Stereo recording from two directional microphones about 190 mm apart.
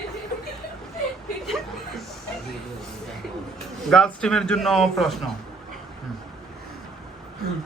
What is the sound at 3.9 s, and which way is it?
A man's voice, 5° left (ahead or behind).